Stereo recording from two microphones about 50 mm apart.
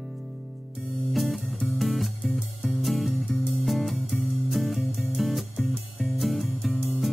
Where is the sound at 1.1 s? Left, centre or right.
Centre.